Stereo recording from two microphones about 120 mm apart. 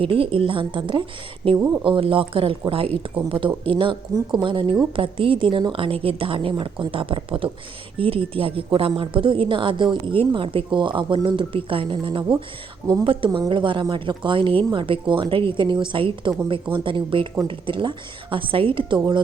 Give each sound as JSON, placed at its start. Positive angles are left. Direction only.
{"t": 0.0, "sound": "speech", "side_deg": -50}
{"t": 1.5, "sound": "speech", "side_deg": -20}
{"t": 1.8, "sound": "speech", "side_deg": -45}